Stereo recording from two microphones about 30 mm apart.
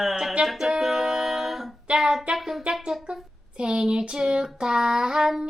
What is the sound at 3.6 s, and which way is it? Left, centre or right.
Child singing, right.